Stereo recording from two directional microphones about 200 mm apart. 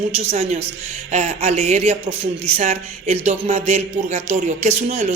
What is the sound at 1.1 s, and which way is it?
A man's voice, 35° right (ahead or behind).